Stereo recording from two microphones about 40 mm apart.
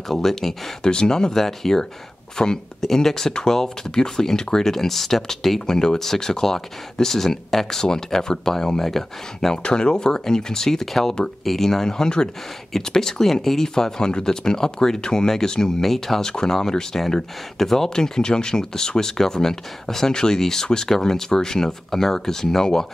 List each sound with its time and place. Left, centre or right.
0.1 s speech: centre
0.8 s speech: centre
9.6 s speech: left
16.3 s speech: centre